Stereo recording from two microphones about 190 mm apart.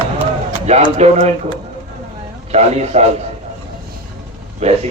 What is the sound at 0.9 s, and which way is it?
Speech, 35° right (ahead or behind).